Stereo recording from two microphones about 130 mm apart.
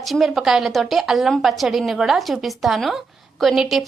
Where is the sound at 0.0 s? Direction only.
Centre (ahead or behind).